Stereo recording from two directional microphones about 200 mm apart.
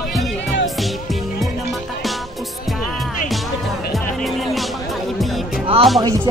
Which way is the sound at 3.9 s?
Centre (ahead or behind).